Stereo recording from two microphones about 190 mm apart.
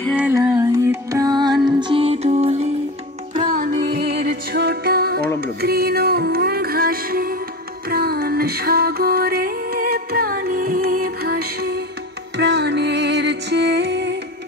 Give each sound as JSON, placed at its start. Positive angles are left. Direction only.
{"t": 0.2, "sound": "music", "side_deg": -10}
{"t": 3.3, "sound": "music", "side_deg": -45}